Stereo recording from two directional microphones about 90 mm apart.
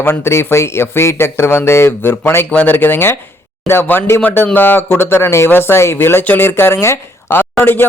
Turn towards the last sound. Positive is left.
turn(degrees=20)  # may be behind; listen again after turning